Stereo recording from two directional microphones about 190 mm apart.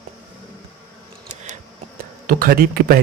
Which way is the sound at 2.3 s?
50° right (ahead or behind).